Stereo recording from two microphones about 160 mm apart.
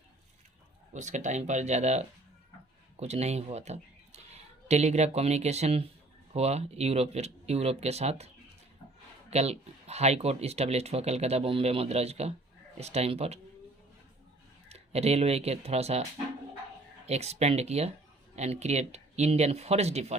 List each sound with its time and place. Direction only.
0.9 s speech: 50° right (ahead or behind)
9.3 s speech: 40° right (ahead or behind)
14.7 s speech: 40° right (ahead or behind)
17.1 s speech: 40° right (ahead or behind)